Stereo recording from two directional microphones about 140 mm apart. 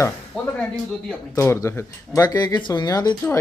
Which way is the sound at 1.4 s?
20° left (ahead or behind).